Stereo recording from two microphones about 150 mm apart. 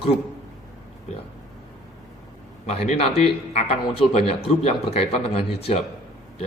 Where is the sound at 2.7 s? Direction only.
40° left (ahead or behind).